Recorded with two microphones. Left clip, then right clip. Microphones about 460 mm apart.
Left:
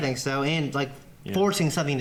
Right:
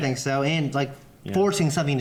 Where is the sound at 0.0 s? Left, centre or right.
Right.